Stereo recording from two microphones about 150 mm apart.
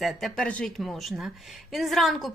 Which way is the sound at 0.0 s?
Centre (ahead or behind).